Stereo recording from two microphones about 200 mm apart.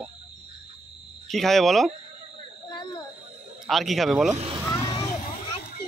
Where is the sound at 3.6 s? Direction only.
Centre (ahead or behind).